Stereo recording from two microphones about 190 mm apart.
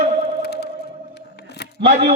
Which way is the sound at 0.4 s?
60° left (ahead or behind).